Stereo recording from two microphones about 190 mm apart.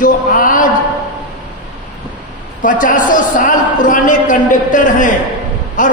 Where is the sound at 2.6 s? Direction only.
45° left (ahead or behind).